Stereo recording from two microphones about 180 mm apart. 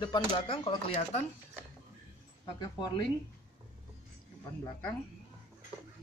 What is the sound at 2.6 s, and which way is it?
Speech, 20° left (ahead or behind).